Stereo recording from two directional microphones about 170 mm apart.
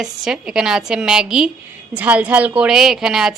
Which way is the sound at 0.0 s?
5° right (ahead or behind).